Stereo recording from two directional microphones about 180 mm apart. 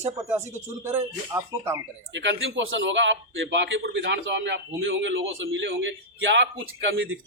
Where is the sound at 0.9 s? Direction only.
15° right (ahead or behind).